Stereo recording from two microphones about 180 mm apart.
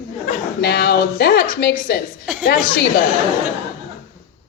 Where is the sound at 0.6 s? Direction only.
65° left (ahead or behind).